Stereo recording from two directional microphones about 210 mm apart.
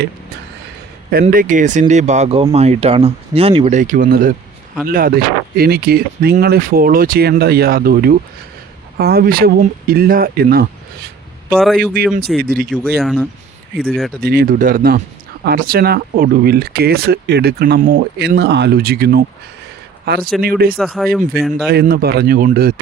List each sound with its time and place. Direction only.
1.2 s speech: 40° right (ahead or behind)
3.8 s speech: 40° right (ahead or behind)
11.5 s speech: centre (ahead or behind)
12.4 s speech: 45° right (ahead or behind)
13.0 s speech: centre (ahead or behind)
14.2 s speech: 45° right (ahead or behind)
20.7 s speech: centre (ahead or behind)
21.5 s speech: 45° right (ahead or behind)